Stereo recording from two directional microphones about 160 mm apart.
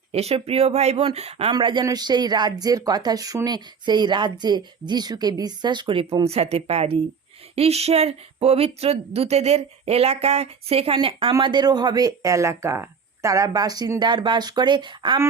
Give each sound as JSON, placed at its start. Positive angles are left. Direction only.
{"t": 0.1, "sound": "speech", "side_deg": -40}